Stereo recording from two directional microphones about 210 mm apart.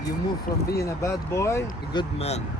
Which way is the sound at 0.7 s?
15° left (ahead or behind).